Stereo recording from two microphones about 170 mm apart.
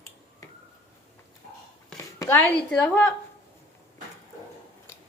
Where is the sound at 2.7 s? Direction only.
10° left (ahead or behind).